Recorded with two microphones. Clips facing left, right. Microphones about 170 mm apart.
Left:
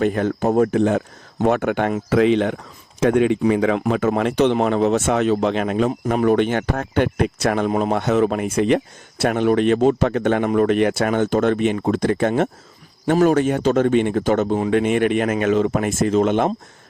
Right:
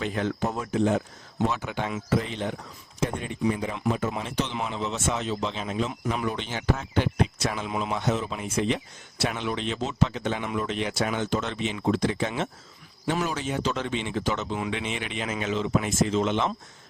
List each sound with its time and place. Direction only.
0.0 s speech: 50° left (ahead or behind); by 3.8 s 90° left
3.8 s speech: 70° left (ahead or behind)
5.9 s speech: 40° left (ahead or behind)
6.2 s speech: 55° left (ahead or behind)